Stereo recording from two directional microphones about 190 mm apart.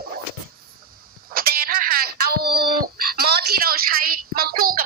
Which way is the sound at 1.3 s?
50° right (ahead or behind).